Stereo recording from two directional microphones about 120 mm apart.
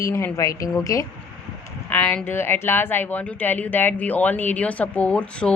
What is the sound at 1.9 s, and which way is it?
A woman's voice, 15° left (ahead or behind).